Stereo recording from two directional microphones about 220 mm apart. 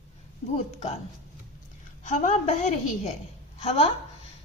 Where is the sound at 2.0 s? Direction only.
35° left (ahead or behind).